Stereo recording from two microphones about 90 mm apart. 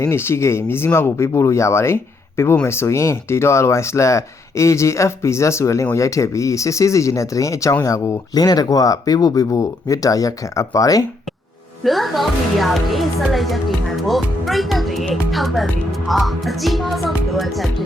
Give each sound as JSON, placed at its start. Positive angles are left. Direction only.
{"t": 0.0, "sound": "speech", "side_deg": 30}
{"t": 8.4, "sound": "speech", "side_deg": 45}
{"t": 11.8, "sound": "a woman's voice", "side_deg": 0}